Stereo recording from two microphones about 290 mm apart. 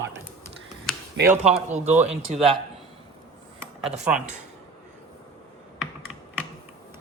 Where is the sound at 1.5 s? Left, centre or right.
Right.